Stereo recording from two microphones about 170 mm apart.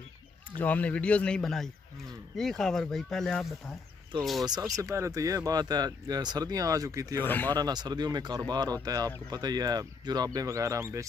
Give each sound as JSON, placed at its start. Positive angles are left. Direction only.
{"t": 0.6, "sound": "a man's voice", "side_deg": 10}
{"t": 4.5, "sound": "speech", "side_deg": -20}
{"t": 7.2, "sound": "a man's voice", "side_deg": 10}
{"t": 7.5, "sound": "speech", "side_deg": -25}